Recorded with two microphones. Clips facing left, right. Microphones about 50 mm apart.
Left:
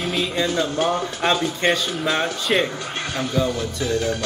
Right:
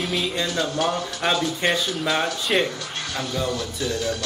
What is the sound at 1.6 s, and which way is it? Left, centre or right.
Speech, centre.